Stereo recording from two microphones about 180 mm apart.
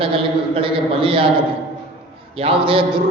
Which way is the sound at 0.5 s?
30° right (ahead or behind).